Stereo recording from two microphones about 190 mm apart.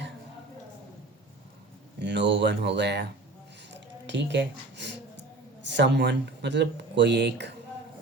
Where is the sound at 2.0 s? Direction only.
65° right (ahead or behind).